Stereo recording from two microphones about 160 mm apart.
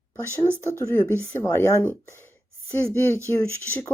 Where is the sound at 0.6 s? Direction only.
15° left (ahead or behind).